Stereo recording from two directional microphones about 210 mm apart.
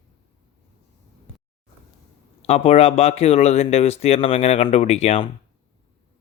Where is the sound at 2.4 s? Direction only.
30° left (ahead or behind).